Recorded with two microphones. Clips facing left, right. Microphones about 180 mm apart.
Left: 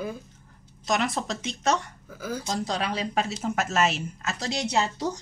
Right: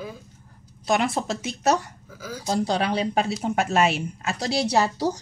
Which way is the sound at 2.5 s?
30° right (ahead or behind).